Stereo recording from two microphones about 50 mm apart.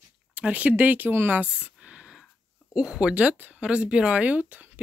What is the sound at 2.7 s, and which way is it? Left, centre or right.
Speech, centre.